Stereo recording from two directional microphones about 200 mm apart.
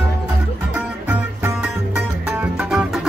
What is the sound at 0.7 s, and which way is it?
Music, 5° right (ahead or behind).